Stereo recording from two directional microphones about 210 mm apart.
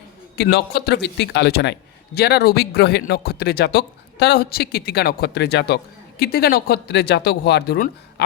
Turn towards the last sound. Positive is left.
turn(degrees=50)  # may be behind; listen again after turning